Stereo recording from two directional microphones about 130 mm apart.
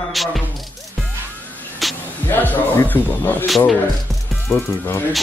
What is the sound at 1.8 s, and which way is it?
Music, centre (ahead or behind).